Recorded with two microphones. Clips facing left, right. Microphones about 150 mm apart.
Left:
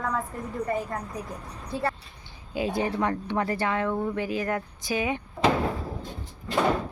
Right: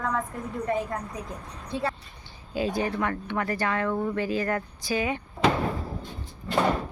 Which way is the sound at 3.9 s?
5° left (ahead or behind).